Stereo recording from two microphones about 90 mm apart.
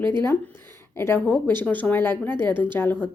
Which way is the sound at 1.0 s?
25° left (ahead or behind).